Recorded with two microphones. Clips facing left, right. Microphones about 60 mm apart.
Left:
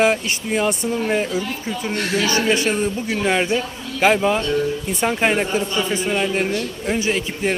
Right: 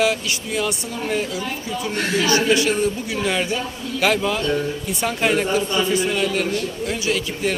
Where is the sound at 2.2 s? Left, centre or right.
Left.